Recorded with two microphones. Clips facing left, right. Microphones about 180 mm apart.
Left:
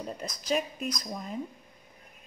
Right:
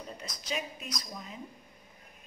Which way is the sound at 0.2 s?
45° left (ahead or behind).